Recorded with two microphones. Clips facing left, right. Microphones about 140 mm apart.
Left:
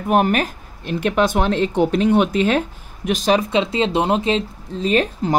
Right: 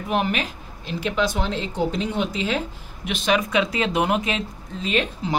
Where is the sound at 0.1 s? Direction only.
50° left (ahead or behind).